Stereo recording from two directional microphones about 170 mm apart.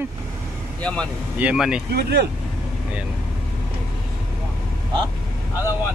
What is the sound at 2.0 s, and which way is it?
Speech, 70° right (ahead or behind).